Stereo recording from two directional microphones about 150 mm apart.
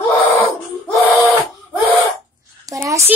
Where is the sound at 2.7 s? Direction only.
20° right (ahead or behind).